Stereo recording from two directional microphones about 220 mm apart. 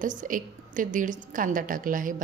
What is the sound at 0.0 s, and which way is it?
A woman's voice, 35° right (ahead or behind).